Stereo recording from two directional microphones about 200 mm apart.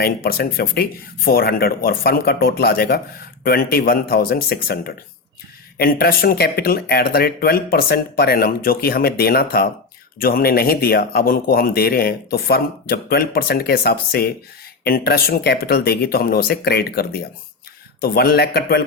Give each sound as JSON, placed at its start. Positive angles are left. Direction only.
{"t": 0.0, "sound": "speech", "side_deg": 50}